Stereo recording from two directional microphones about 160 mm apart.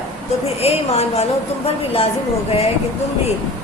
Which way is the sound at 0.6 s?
40° left (ahead or behind).